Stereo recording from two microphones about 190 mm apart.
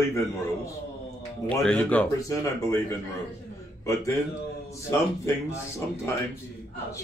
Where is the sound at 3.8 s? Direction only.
15° left (ahead or behind).